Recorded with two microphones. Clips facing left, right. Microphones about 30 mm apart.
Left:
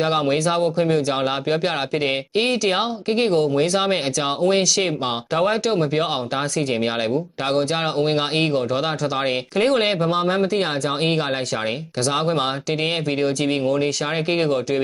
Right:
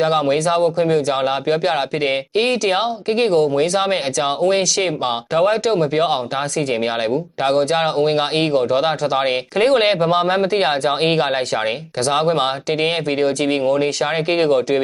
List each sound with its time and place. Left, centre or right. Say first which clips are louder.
0.0 s speech: right 3 dB; centre; by 14.8 s right